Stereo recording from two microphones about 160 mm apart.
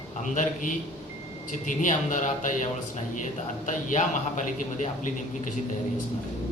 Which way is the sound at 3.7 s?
50° left (ahead or behind).